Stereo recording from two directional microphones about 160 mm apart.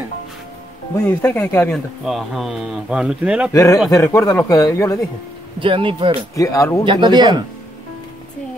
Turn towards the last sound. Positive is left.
turn(degrees=-30)  # may be behind; listen again after turning